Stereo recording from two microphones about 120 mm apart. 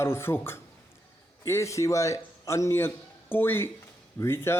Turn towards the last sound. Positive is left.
turn(degrees=20)  # may be behind; listen again after turning